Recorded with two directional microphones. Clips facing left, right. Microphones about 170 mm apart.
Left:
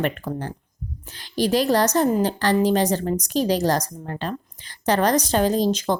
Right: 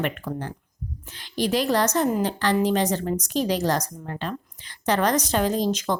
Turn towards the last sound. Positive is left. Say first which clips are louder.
# left 3 dB
turn(degrees=30)  # may be behind; listen again after turning